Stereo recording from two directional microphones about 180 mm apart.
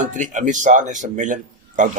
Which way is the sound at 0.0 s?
45° right (ahead or behind).